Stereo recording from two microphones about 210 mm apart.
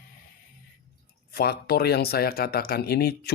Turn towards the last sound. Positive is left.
turn(degrees=50)  # may be behind; listen again after turning